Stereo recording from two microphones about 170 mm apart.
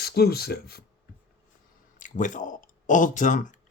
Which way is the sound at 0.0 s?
70° left (ahead or behind).